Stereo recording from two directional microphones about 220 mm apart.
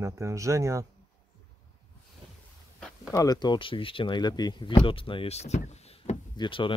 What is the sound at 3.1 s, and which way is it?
Speech, 15° left (ahead or behind).